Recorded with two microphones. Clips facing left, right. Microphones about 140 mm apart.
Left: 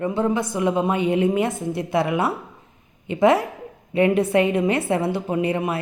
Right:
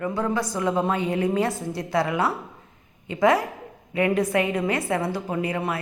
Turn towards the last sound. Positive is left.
turn(degrees=20)  # may be behind; listen again after turning